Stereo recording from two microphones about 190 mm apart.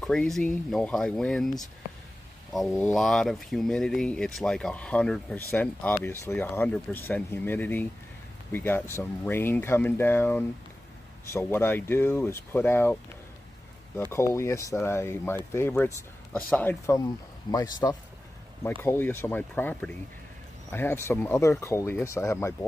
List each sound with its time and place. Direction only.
0.0 s speech: 5° left (ahead or behind)
2.5 s speech: centre (ahead or behind)
14.1 s speech: 15° left (ahead or behind)